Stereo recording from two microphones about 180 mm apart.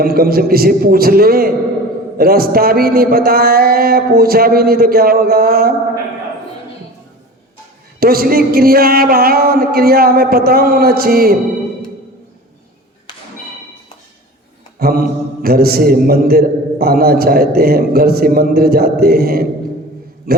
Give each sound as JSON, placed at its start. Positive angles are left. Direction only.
{"t": 0.0, "sound": "a man's voice", "side_deg": -55}
{"t": 7.9, "sound": "a man's voice", "side_deg": -55}
{"t": 14.8, "sound": "a man's voice", "side_deg": -55}
{"t": 20.3, "sound": "mantra", "side_deg": -60}